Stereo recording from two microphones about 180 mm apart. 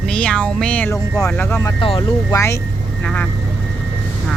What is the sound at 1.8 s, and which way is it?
Speech, 30° left (ahead or behind).